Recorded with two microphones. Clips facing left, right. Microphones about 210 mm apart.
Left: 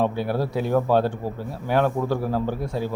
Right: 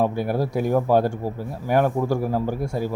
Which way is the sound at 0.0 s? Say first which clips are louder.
Right 1 dB; 10° right (ahead or behind).